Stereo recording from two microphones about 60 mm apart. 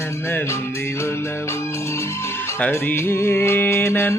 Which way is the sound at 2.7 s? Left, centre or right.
Left.